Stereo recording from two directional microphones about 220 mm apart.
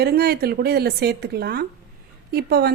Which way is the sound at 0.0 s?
45° right (ahead or behind).